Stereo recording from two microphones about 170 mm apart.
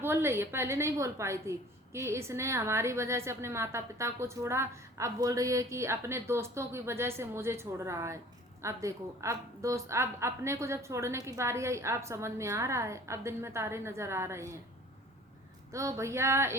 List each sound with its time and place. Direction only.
0.0 s a woman's voice: 15° right (ahead or behind)
15.7 s a woman's voice: 20° right (ahead or behind)